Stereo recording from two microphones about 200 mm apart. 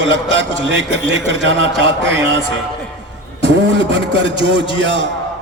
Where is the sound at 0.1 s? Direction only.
65° right (ahead or behind).